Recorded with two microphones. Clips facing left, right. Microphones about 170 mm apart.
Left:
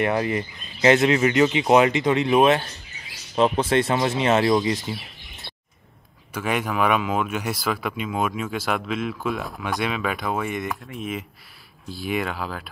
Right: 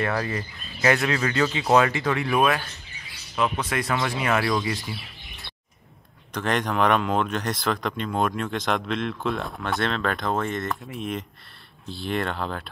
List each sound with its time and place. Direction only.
0.0 s speech: 20° left (ahead or behind)
6.3 s speech: 10° left (ahead or behind)